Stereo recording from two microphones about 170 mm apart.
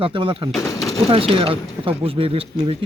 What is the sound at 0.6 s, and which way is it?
Speech, 20° left (ahead or behind).